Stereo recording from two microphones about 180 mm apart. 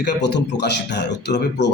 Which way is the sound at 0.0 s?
70° left (ahead or behind).